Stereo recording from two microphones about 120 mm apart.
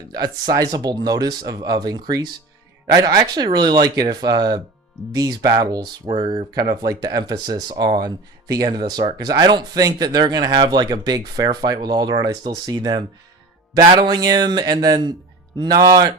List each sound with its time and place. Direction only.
0.1 s speech: 30° right (ahead or behind)